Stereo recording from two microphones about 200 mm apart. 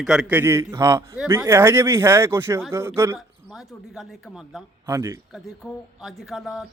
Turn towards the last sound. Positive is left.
turn(degrees=0)  # may be behind; listen again after turning